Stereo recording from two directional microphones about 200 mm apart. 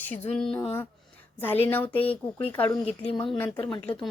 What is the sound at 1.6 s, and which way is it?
A woman's voice, 10° left (ahead or behind).